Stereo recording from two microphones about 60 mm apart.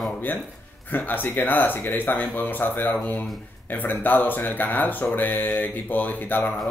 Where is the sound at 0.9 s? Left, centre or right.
Left.